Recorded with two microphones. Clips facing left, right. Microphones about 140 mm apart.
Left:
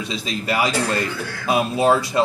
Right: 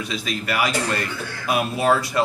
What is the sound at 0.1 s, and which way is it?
Speech, 25° left (ahead or behind).